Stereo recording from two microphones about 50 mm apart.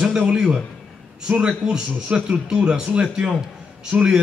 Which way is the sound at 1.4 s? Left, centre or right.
Centre.